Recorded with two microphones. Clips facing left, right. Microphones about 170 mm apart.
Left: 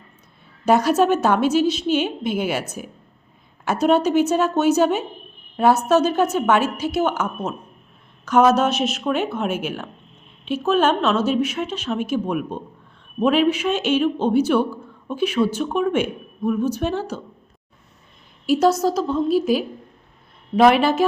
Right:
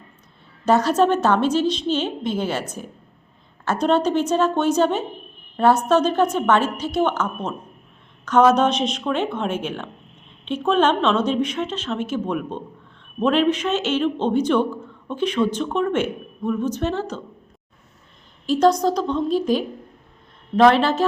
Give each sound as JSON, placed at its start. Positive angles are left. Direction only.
{"t": 0.6, "sound": "a man's voice", "side_deg": 10}
{"t": 18.4, "sound": "a woman's voice", "side_deg": 10}